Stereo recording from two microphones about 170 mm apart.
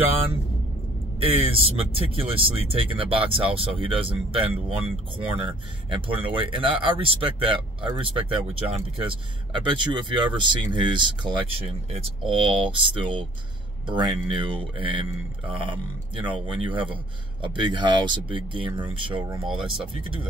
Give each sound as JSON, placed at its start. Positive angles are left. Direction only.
{"t": 1.2, "sound": "speech", "side_deg": -35}